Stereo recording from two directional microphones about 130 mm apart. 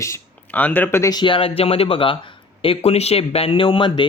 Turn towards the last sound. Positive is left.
turn(degrees=40)  # may be behind; listen again after turning